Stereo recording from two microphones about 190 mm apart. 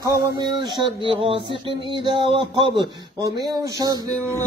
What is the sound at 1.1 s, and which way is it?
Speech, 30° right (ahead or behind).